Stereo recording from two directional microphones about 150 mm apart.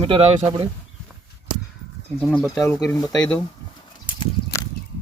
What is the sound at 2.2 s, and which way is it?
Speech, centre (ahead or behind).